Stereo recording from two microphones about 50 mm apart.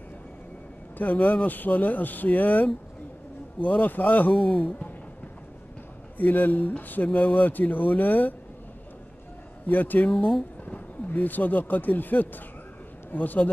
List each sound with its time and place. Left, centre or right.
0.9 s speech: left
6.1 s speech: left
9.7 s speech: left